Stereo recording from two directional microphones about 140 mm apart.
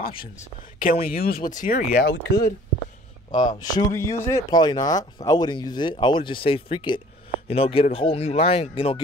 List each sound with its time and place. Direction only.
0.7 s speech: 85° left; by 1.9 s 70° left (ahead or behind)
2.0 s speech: 90° left
3.3 s speech: 30° left (ahead or behind)